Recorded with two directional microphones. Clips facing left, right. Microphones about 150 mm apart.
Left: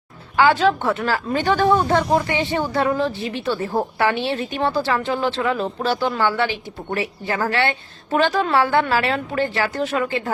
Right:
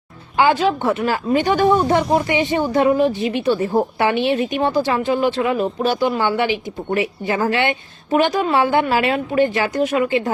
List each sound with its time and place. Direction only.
0.3 s a woman's voice: 15° right (ahead or behind)